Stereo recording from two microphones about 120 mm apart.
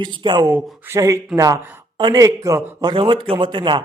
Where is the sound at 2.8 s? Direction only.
45° right (ahead or behind).